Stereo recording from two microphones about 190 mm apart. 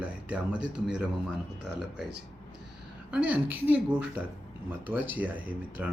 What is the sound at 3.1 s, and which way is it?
Speech, 10° right (ahead or behind).